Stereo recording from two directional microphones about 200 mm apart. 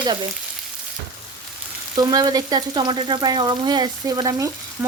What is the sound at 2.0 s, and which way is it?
Frying, 20° right (ahead or behind).